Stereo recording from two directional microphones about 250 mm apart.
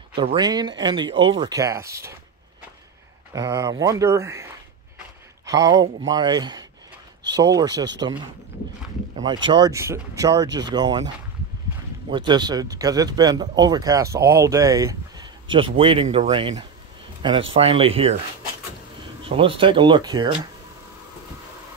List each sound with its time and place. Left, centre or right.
0.1 s speech: right
3.3 s speech: centre
5.8 s speech: centre
9.2 s speech: centre
12.1 s speech: centre
19.2 s speech: right